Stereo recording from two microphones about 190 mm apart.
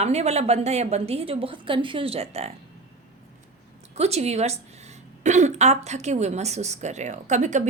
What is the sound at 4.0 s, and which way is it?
Speech, 35° right (ahead or behind).